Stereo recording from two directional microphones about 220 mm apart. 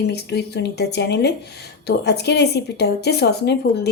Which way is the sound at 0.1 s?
50° left (ahead or behind).